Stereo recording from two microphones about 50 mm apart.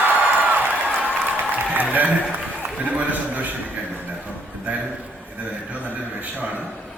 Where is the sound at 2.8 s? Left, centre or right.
Right.